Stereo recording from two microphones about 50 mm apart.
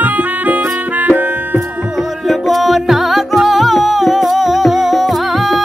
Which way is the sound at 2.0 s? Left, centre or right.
Centre.